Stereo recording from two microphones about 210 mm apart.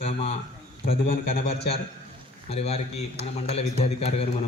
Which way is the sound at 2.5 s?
30° left (ahead or behind).